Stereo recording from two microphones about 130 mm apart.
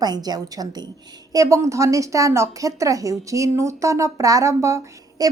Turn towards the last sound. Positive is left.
turn(degrees=-25)  # may be behind; listen again after turning